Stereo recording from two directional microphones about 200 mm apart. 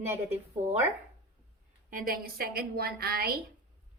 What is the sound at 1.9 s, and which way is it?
A woman's voice, 45° right (ahead or behind).